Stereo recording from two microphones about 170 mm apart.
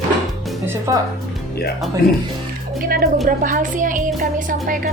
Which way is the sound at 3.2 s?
55° right (ahead or behind).